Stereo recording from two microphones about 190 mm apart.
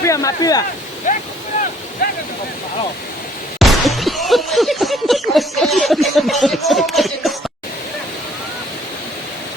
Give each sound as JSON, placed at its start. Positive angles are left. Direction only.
{"t": 0.0, "sound": "speech", "side_deg": 15}
{"t": 3.6, "sound": "speech", "side_deg": 0}